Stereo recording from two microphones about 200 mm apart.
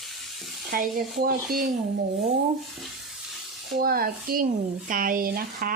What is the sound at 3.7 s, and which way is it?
Speech, 50° right (ahead or behind).